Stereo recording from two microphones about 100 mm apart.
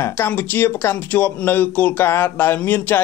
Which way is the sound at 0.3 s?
20° left (ahead or behind).